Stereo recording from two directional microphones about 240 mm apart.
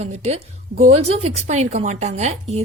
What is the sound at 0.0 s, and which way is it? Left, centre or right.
A woman's voice, right.